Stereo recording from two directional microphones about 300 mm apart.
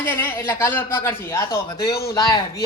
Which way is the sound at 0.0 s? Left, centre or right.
Centre.